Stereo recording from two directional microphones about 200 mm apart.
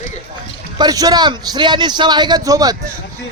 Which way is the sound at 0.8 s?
20° right (ahead or behind).